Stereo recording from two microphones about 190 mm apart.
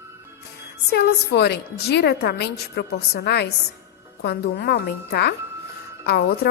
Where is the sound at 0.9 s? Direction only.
60° left (ahead or behind).